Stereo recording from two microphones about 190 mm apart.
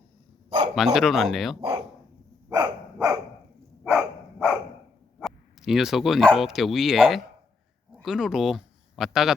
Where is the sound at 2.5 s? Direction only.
20° right (ahead or behind).